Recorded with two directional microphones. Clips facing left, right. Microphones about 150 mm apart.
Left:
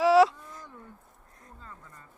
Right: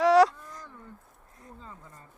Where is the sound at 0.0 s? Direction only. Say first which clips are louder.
Even; centre (ahead or behind).